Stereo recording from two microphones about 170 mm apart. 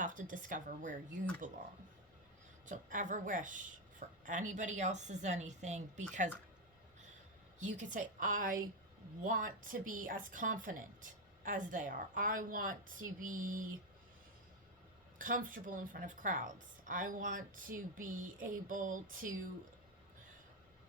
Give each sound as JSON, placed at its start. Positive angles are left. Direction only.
{"t": 0.0, "sound": "a woman's voice", "side_deg": -50}
{"t": 2.6, "sound": "a woman's voice", "side_deg": -50}
{"t": 7.6, "sound": "a woman's voice", "side_deg": -45}
{"t": 15.2, "sound": "a woman's voice", "side_deg": -55}